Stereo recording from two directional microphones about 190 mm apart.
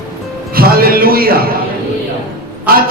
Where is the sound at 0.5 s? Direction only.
50° right (ahead or behind).